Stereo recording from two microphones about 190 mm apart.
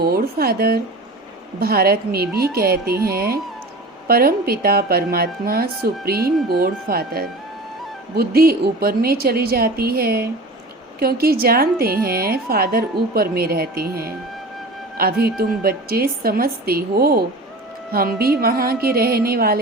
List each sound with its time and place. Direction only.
0.0 s speech: 55° right (ahead or behind)